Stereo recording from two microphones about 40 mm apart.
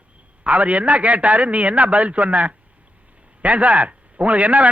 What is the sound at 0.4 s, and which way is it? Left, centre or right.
A man's voice, right.